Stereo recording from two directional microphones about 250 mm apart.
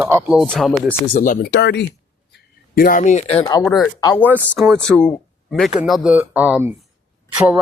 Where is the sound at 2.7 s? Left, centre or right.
Left.